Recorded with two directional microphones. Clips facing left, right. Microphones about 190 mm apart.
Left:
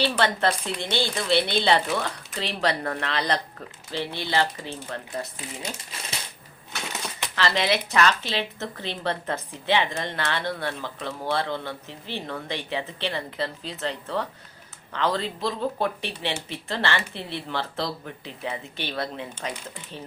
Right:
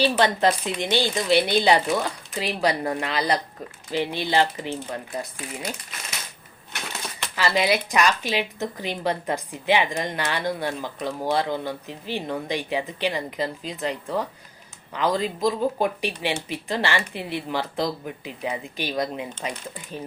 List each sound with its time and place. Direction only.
0.0 s a woman's voice: 15° right (ahead or behind)
5.6 s speech: 30° left (ahead or behind)
7.3 s a woman's voice: 10° right (ahead or behind)